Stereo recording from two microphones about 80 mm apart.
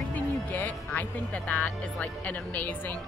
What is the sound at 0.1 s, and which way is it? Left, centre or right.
Speech, left.